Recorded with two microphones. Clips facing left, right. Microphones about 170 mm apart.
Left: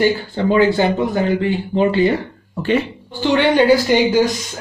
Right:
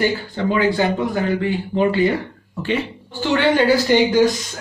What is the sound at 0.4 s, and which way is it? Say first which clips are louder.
Speech: left 4 dB; 30° left (ahead or behind).